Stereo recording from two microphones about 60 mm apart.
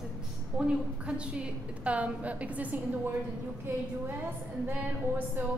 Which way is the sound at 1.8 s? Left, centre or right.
Right.